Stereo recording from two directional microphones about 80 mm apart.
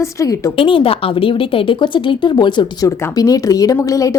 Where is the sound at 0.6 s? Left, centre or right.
Left.